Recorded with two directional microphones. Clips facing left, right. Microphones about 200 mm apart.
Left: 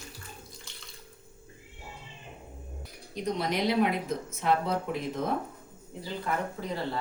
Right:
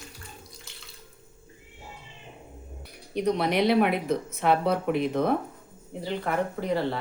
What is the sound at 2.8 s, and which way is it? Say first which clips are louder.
Speech: right 7 dB; 65° right (ahead or behind).